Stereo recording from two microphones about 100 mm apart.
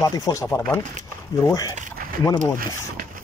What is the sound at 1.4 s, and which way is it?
Speech, 35° left (ahead or behind).